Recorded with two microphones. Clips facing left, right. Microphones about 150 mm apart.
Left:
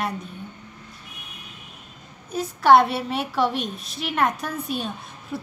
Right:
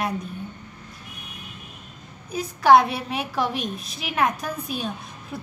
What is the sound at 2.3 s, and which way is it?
A woman's voice, centre (ahead or behind).